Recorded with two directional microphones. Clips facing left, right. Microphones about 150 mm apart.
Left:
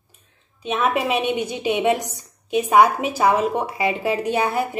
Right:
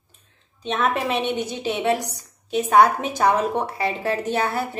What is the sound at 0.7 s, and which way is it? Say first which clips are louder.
A woman's voice: left 2 dB; 10° left (ahead or behind).